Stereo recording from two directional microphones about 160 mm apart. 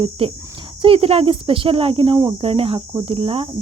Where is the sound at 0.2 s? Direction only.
35° right (ahead or behind).